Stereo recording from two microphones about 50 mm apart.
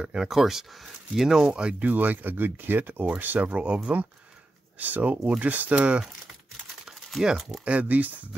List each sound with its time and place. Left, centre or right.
0.0 s speech: centre
1.5 s speech: right
1.9 s speech: right
3.4 s speech: right
7.6 s speech: right